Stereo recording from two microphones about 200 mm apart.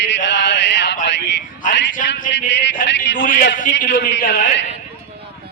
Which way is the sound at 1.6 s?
40° left (ahead or behind).